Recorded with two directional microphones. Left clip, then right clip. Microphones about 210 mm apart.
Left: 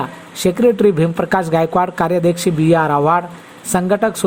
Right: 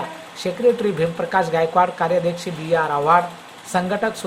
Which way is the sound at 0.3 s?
35° left (ahead or behind).